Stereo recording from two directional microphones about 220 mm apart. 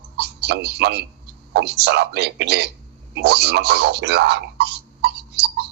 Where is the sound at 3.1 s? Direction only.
50° right (ahead or behind).